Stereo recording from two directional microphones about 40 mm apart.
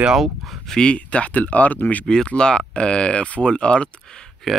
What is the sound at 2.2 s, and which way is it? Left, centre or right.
Speech, left.